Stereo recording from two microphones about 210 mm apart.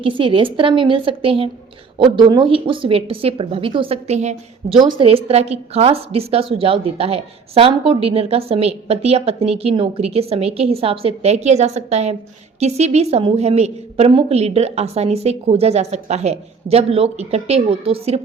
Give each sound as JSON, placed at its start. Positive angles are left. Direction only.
{"t": 0.0, "sound": "a woman's voice", "side_deg": -25}